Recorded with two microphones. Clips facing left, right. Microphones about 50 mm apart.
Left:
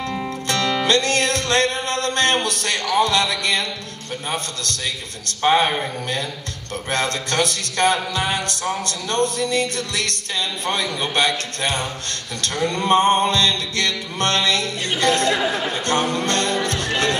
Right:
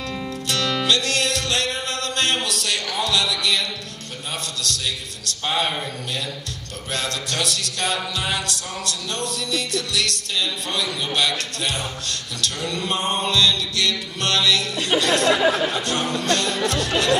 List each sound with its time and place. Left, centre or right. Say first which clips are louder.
0.2 s music: left 2 dB; left
5.4 s music: left 7 dB; left